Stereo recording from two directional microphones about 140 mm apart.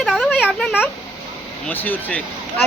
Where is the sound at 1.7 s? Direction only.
15° left (ahead or behind).